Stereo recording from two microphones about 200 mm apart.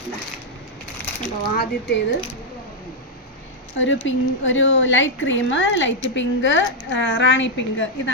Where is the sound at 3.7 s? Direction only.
70° left (ahead or behind).